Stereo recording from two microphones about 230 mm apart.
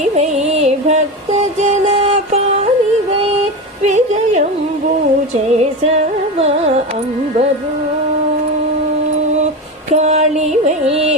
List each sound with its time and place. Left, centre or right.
0.0 s music: right
3.8 s music: right
9.9 s music: right